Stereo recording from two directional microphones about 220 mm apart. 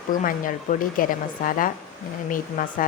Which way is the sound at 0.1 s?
40° left (ahead or behind).